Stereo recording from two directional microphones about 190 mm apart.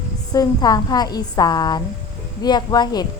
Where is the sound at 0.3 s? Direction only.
20° left (ahead or behind).